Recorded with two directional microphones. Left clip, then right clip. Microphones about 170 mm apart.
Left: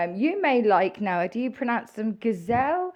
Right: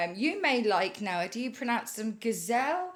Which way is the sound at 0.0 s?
45° left (ahead or behind).